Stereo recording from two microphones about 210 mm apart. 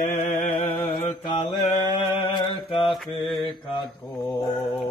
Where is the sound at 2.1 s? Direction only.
20° left (ahead or behind).